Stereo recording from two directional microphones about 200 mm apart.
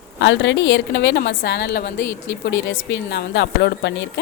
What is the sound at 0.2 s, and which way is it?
A woman's voice, 65° left (ahead or behind).